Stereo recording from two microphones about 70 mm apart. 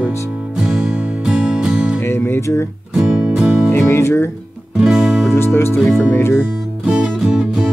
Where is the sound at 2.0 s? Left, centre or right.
Left.